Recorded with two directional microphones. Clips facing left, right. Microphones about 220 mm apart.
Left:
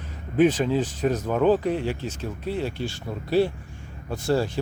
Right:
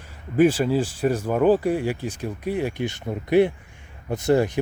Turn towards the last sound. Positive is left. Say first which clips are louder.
# right 4 dB
turn(degrees=-20)  # may be behind; listen again after turning